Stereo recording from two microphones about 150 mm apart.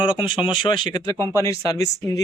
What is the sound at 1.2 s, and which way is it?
Speech, 20° right (ahead or behind).